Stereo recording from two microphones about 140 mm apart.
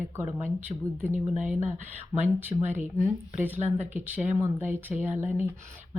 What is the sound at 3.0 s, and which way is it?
Speech, 15° right (ahead or behind).